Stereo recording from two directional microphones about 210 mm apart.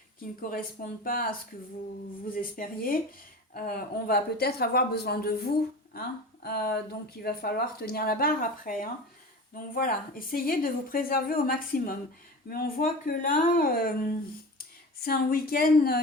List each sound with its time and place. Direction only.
0.5 s speech: 45° left (ahead or behind)